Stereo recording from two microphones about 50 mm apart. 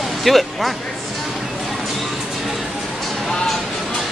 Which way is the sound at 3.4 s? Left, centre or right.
Centre.